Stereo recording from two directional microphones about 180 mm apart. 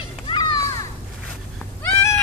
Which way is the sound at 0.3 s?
20° left (ahead or behind).